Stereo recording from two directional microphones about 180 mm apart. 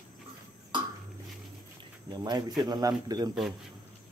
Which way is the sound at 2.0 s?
25° right (ahead or behind).